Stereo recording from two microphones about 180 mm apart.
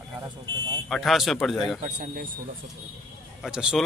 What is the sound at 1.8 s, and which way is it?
Speech, 40° right (ahead or behind).